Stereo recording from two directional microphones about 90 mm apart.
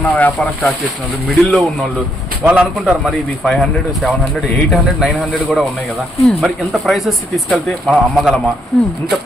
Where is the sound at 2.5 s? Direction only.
15° right (ahead or behind).